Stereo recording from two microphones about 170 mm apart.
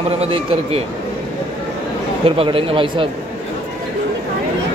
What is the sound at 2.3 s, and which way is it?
Speech, 35° right (ahead or behind).